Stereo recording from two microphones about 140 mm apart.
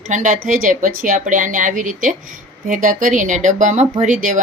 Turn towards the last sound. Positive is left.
turn(degrees=-65)  # may be behind; listen again after turning